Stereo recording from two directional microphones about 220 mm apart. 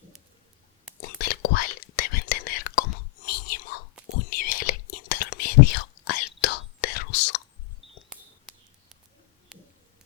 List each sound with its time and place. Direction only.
1.2 s whispering: 40° left (ahead or behind)
8.1 s a sound: centre (ahead or behind)
9.5 s bird: centre (ahead or behind)